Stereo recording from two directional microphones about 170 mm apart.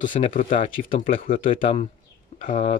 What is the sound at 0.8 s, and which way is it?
Speech, 55° left (ahead or behind).